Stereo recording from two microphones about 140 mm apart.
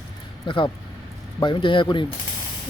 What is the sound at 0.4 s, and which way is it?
Speech, 35° left (ahead or behind).